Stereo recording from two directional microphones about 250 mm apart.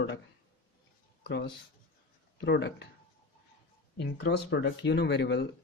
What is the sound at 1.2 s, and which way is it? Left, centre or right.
Speech, left.